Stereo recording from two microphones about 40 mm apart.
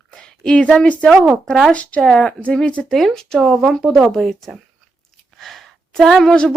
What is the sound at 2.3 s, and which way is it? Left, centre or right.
Speech, left.